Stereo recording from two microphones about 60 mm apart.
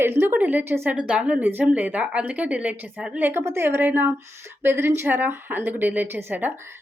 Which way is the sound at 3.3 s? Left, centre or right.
Right.